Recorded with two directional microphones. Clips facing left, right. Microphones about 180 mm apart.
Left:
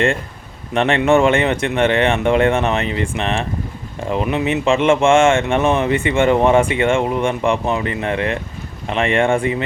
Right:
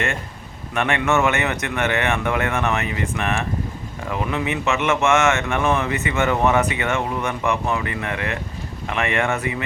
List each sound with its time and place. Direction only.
0.7 s speech: 30° left (ahead or behind)